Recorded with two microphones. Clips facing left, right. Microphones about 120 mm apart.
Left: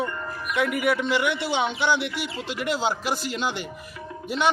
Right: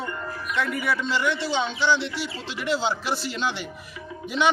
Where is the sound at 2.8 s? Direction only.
5° left (ahead or behind).